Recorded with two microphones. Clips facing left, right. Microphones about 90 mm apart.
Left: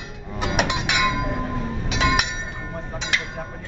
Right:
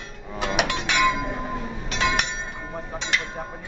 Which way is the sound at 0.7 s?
10° left (ahead or behind).